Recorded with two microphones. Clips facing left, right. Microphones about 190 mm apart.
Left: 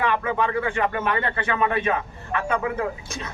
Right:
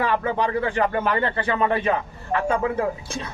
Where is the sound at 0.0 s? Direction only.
35° right (ahead or behind).